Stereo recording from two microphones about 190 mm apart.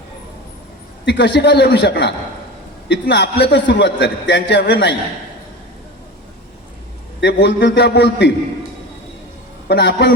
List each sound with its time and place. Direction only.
1.0 s a man's voice: 65° left (ahead or behind)
7.2 s a man's voice: 65° left (ahead or behind)
9.6 s a man's voice: 65° left (ahead or behind)